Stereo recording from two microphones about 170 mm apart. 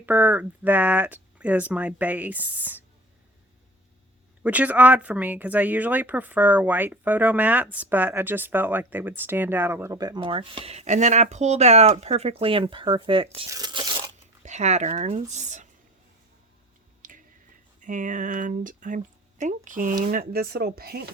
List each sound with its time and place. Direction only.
0.0 s speech: 10° right (ahead or behind)
4.4 s speech: 10° right (ahead or behind); by 14.1 s 25° right (ahead or behind)
14.4 s speech: 40° right (ahead or behind)
17.0 s a sound: 50° right (ahead or behind)
17.7 s speech: 50° right (ahead or behind); by 21.1 s 65° right (ahead or behind)